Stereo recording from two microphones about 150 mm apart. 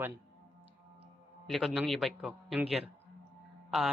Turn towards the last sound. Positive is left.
turn(degrees=0)  # may be behind; listen again after turning